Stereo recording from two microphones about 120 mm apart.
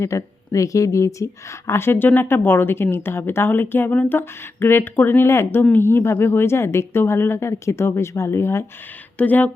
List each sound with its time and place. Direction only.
0.0 s speech: 25° left (ahead or behind)